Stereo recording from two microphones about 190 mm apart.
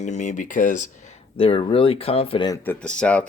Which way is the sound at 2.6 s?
5° left (ahead or behind).